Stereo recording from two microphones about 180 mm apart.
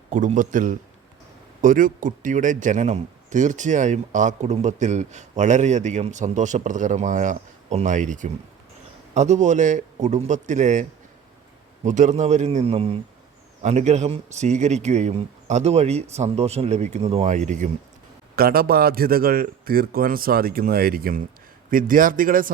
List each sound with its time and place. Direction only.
0.1 s speech: 45° right (ahead or behind)
11.9 s speech: 45° right (ahead or behind)
18.3 s speech: 55° right (ahead or behind)